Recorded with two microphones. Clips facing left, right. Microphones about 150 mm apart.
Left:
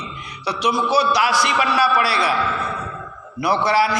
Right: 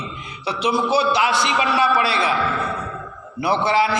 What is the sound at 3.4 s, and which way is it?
Speech, 25° right (ahead or behind).